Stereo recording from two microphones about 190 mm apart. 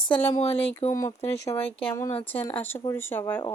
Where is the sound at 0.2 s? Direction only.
30° left (ahead or behind).